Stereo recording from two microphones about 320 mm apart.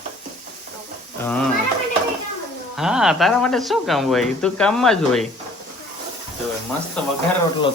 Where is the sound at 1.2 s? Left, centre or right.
Centre.